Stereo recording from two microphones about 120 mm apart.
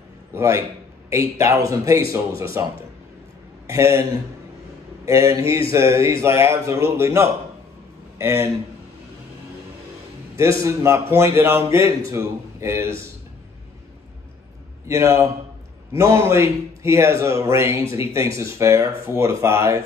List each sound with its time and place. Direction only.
0.3 s a man's voice: 20° right (ahead or behind)
5.0 s a man's voice: 25° right (ahead or behind)
10.6 s a man's voice: 25° right (ahead or behind)
14.9 s a man's voice: 25° right (ahead or behind)